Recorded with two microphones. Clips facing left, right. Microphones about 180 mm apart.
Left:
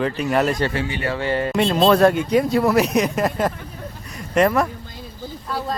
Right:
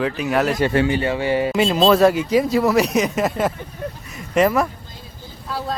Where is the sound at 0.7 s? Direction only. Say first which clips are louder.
Right 7 dB; 50° right (ahead or behind).